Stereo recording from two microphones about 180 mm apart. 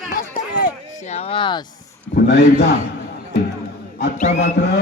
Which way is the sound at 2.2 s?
70° left (ahead or behind).